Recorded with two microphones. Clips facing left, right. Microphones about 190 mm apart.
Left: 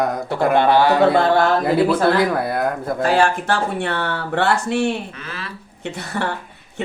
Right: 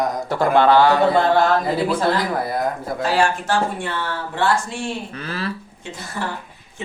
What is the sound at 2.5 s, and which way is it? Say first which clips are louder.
Speech: left 2 dB; 60° left (ahead or behind).